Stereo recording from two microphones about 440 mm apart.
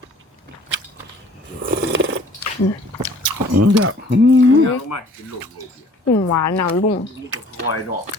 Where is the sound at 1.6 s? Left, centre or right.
Right.